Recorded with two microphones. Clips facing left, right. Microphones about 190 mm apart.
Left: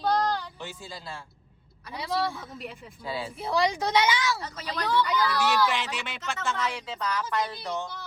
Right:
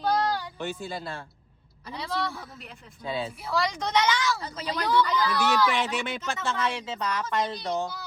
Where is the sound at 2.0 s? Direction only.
10° left (ahead or behind).